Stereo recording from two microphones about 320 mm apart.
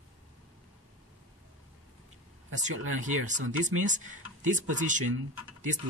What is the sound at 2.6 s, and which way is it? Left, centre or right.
Speech, right.